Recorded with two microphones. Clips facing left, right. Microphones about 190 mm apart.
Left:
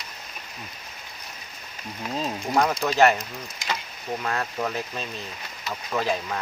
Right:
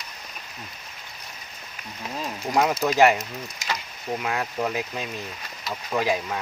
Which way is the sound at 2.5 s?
5° right (ahead or behind).